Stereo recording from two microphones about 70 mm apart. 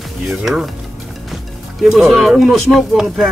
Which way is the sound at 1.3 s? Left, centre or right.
Centre.